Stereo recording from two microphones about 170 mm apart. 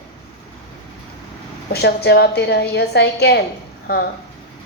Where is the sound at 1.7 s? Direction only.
70° left (ahead or behind).